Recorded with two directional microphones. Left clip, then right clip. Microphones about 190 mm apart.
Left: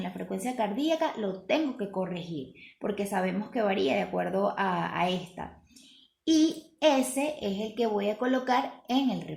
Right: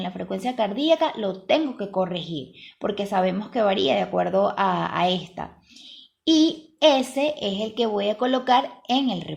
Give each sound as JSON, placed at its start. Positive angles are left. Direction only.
{"t": 0.0, "sound": "a child's voice", "side_deg": -35}
{"t": 3.1, "sound": "a child's voice", "side_deg": -40}